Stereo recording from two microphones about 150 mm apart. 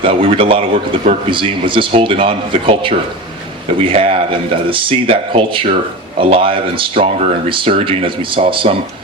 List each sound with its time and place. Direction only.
0.0 s speech: 35° right (ahead or behind)